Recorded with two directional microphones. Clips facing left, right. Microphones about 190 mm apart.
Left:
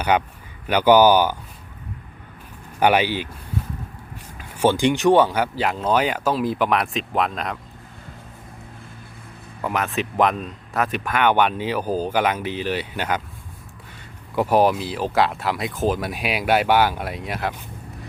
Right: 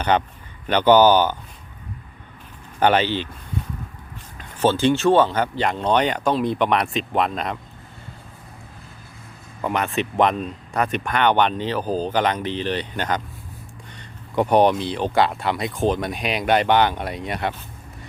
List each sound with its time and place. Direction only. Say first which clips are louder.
0.1 s speech: even; 10° left (ahead or behind)
2.8 s speech: even; 10° left (ahead or behind)
4.4 s speech: left 1 dB; 10° left (ahead or behind)
9.6 s speech: right 1 dB; centre (ahead or behind)
14.3 s speech: right 1 dB; 5° left (ahead or behind)